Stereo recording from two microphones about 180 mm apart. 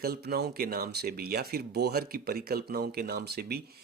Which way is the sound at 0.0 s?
60° right (ahead or behind).